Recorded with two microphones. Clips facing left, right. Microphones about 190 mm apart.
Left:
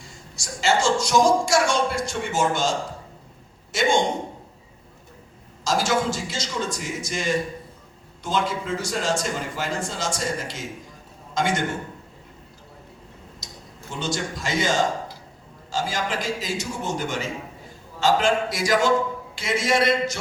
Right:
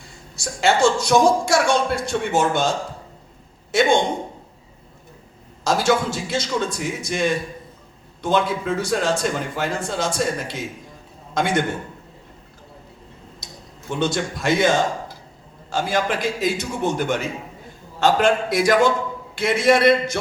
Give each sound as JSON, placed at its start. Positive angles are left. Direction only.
{"t": 0.0, "sound": "a woman's voice", "side_deg": -60}
{"t": 5.6, "sound": "a woman's voice", "side_deg": -60}
{"t": 13.4, "sound": "a sound", "side_deg": -60}
{"t": 13.9, "sound": "a woman's voice", "side_deg": -60}